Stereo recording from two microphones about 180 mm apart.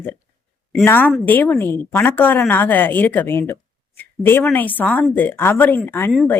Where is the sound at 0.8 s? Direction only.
10° left (ahead or behind).